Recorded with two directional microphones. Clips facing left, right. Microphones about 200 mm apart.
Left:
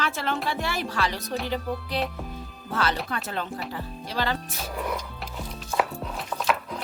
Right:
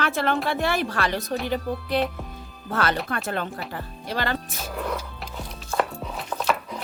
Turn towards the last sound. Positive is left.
turn(degrees=0)  # may be behind; listen again after turning